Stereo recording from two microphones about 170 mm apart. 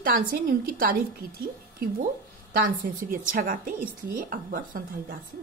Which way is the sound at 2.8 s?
55° right (ahead or behind).